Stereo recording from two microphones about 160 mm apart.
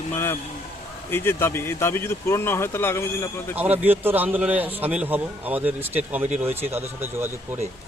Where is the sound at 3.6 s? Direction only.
10° right (ahead or behind).